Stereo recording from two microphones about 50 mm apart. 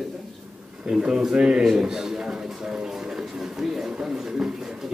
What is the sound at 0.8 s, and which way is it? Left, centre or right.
Speech, centre.